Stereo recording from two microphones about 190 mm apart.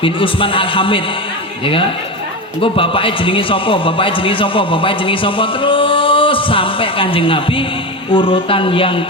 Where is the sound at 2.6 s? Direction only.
30° left (ahead or behind).